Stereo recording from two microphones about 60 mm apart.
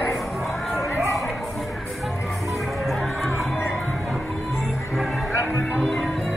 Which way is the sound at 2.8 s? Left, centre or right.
Centre.